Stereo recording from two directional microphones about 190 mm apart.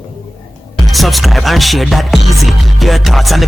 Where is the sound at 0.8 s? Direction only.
Centre (ahead or behind).